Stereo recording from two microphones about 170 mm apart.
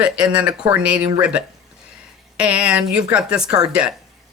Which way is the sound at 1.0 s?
25° right (ahead or behind).